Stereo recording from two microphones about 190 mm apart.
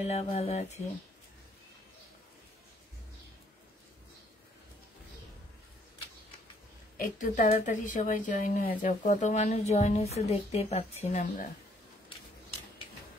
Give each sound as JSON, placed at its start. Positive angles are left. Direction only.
{"t": 0.0, "sound": "a woman's voice", "side_deg": 35}
{"t": 7.0, "sound": "a woman's voice", "side_deg": 45}